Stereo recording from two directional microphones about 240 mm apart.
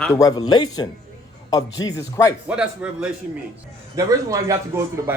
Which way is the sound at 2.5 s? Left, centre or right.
Centre.